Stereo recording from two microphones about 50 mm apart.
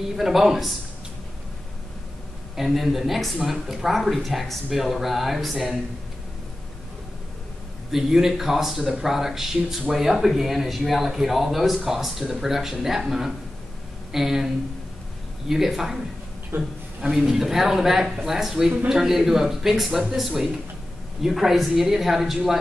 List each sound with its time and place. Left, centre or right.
0.1 s speech: centre
2.5 s speech: centre
7.9 s speech: centre
16.5 s a man's voice: right
17.0 s speech: centre